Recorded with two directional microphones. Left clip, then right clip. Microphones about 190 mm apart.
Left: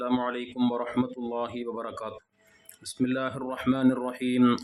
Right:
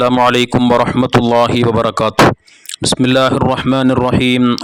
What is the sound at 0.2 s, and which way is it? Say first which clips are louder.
Speech: right 19 dB; 60° right (ahead or behind).